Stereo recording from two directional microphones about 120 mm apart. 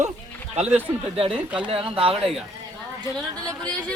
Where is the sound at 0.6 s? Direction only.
15° right (ahead or behind).